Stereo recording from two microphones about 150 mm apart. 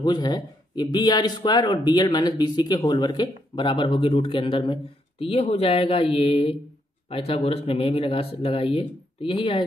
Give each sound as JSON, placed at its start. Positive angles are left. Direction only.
{"t": 0.0, "sound": "a man's voice", "side_deg": 30}